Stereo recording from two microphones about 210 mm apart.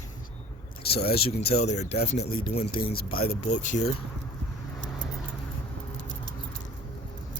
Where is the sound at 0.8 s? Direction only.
50° left (ahead or behind).